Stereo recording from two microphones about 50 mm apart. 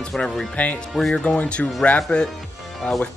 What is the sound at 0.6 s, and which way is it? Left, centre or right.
Speech, left.